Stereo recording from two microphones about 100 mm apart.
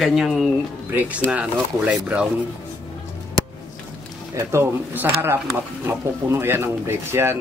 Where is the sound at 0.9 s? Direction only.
15° right (ahead or behind).